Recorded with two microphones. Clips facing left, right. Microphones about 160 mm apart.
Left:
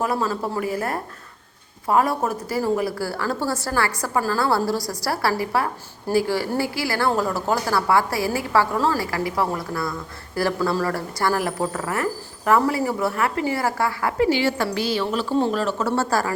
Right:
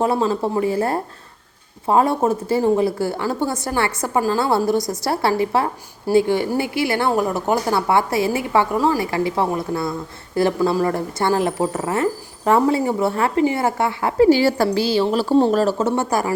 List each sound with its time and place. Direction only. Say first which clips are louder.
0.0 s a woman's voice: right 5 dB; 25° right (ahead or behind)
14.3 s a woman's voice: right 6 dB; 40° right (ahead or behind)
15.8 s speech: right 2 dB; 20° right (ahead or behind)